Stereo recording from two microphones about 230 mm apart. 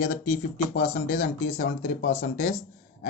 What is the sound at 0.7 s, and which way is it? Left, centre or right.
Speech, left.